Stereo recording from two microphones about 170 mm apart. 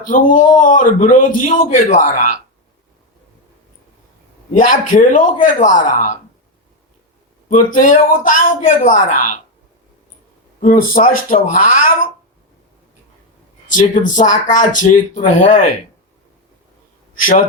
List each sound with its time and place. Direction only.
0.1 s speech: 50° left (ahead or behind)
4.5 s speech: 50° left (ahead or behind)
7.5 s speech: 50° left (ahead or behind)
10.6 s speech: 50° left (ahead or behind)
13.7 s speech: 50° left (ahead or behind)